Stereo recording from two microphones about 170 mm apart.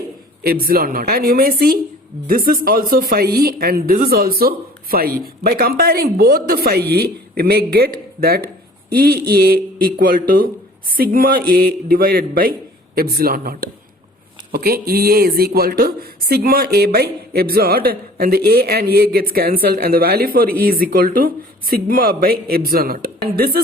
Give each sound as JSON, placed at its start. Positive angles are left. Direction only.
{"t": 0.4, "sound": "speech", "side_deg": -60}